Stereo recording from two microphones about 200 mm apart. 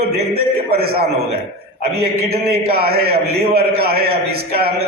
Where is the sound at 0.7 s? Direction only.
50° right (ahead or behind).